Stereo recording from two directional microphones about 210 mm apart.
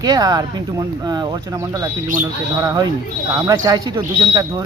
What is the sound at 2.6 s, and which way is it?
Speech, 15° right (ahead or behind).